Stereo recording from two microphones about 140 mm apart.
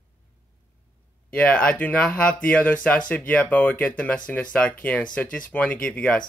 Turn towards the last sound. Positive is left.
turn(degrees=5)  # may be behind; listen again after turning